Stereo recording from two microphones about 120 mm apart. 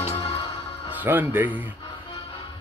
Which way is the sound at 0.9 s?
15° right (ahead or behind).